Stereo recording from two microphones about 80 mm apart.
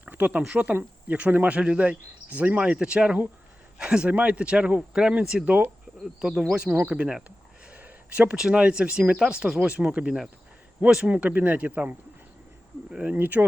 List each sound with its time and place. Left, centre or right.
0.0 s a sound: right
0.4 s speech: centre
5.5 s speech: right
6.1 s speech: centre
13.1 s speech: right